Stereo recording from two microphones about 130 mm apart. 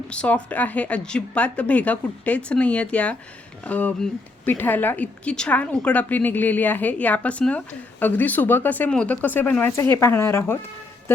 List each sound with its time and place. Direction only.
0.1 s a woman's voice: 10° left (ahead or behind)